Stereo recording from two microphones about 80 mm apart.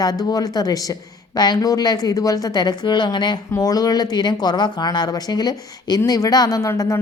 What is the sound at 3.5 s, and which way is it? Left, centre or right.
A woman's voice, left.